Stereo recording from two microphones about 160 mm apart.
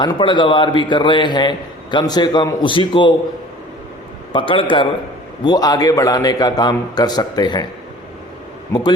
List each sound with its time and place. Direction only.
0.0 s a man's voice: 30° left (ahead or behind)
4.3 s a man's voice: 35° left (ahead or behind)